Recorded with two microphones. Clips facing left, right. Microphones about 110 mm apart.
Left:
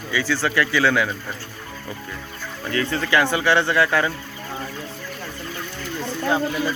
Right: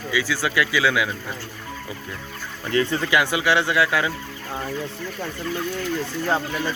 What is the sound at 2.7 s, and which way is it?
Speech, 15° right (ahead or behind).